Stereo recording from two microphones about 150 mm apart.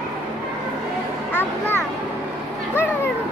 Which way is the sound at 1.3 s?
15° left (ahead or behind).